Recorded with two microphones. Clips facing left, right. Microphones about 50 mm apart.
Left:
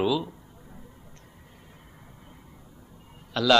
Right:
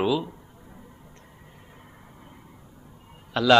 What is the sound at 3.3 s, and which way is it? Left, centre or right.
Speech, right.